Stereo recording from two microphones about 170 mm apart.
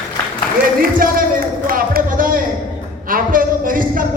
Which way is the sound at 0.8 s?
55° right (ahead or behind).